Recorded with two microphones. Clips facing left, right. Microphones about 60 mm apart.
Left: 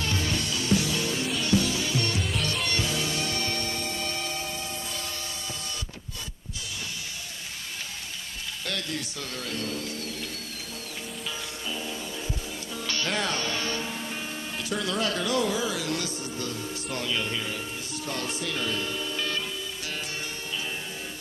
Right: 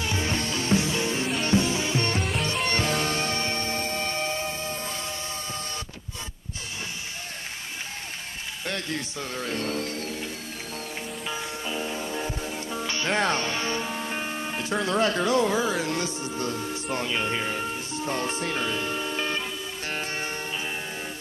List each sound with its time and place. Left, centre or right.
0.0 s music: centre
0.3 s music: right
2.7 s music: right
8.6 s speech: right
11.2 s music: right
12.7 s music: right
13.2 s music: right
14.1 s speech: right